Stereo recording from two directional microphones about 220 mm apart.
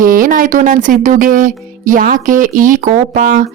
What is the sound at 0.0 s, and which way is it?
Speech, 40° right (ahead or behind).